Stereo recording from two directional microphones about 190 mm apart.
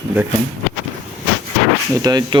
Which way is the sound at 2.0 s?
20° right (ahead or behind).